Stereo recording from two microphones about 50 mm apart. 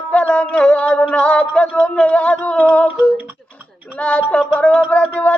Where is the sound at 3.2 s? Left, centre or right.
Right.